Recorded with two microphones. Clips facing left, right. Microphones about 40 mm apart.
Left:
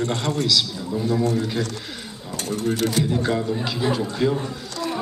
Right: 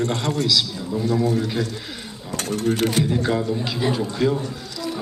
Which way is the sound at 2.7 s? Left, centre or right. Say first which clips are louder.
Even; right.